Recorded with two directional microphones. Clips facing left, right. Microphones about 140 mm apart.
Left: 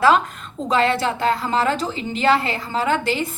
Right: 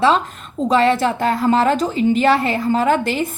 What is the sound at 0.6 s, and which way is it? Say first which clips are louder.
A woman's voice: right 4 dB; 40° right (ahead or behind).